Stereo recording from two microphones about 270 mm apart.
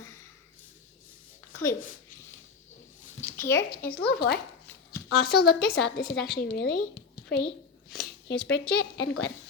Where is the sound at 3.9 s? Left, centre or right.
Left.